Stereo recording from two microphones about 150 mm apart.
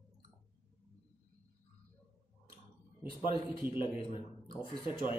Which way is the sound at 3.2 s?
35° left (ahead or behind).